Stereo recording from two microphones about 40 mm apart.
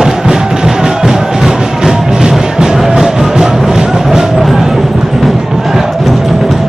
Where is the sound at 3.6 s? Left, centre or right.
Centre.